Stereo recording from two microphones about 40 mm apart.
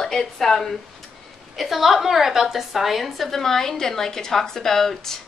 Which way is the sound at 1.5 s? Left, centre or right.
Centre.